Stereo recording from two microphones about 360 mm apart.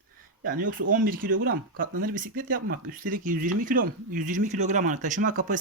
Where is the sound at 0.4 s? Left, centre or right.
Right.